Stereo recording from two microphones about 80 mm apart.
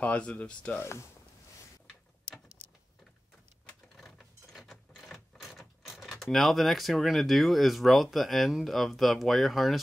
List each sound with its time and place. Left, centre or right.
0.0 s speech: centre
0.7 s speech: left
3.9 s a sound: centre
6.3 s speech: centre